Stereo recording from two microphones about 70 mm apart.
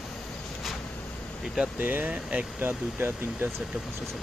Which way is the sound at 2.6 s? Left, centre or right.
Right.